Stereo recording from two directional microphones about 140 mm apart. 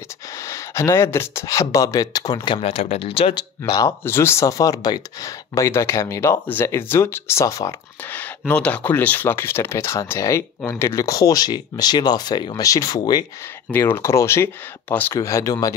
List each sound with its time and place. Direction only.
0.4 s speech: 20° left (ahead or behind)
4.0 s speech: 15° left (ahead or behind)
8.1 s speech: 15° left (ahead or behind)
13.7 s speech: 15° left (ahead or behind)